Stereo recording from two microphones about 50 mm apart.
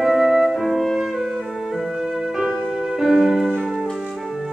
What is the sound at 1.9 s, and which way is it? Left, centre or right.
Music, centre.